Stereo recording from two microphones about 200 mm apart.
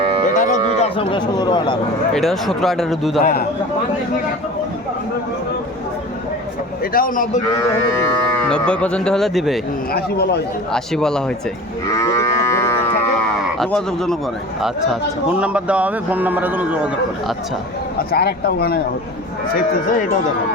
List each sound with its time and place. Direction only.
0.0 s cattle: 30° right (ahead or behind)
0.3 s speech: 40° left (ahead or behind); by 1.8 s 20° left (ahead or behind)
2.1 s speech: centre (ahead or behind)
6.9 s speech: 45° left (ahead or behind)
8.4 s speech: 5° left (ahead or behind)
9.9 s speech: 55° left (ahead or behind)
10.7 s speech: 5° left (ahead or behind)
11.9 s livestock: 15° left (ahead or behind)
13.6 s speech: centre (ahead or behind)
15.3 s a man's voice: 5° right (ahead or behind)
18.1 s speech: 50° left (ahead or behind)
19.5 s speech: 40° left (ahead or behind)